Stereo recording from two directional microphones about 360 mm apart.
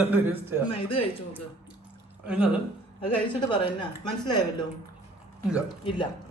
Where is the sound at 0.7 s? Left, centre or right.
Centre.